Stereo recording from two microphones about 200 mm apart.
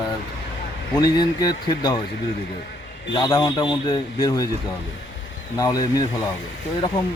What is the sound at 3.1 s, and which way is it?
Speech, 20° left (ahead or behind).